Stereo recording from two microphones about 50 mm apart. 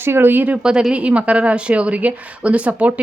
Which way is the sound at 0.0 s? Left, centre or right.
Right.